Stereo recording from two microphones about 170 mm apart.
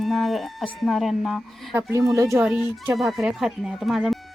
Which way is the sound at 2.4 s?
10° right (ahead or behind).